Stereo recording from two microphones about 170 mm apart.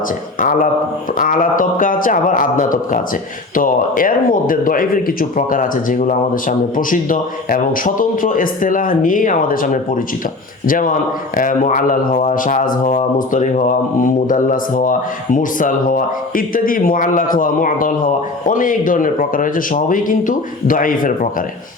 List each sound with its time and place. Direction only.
0.3 s speech: 50° left (ahead or behind)